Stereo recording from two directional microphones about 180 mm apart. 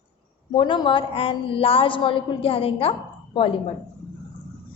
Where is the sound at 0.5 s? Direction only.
25° left (ahead or behind).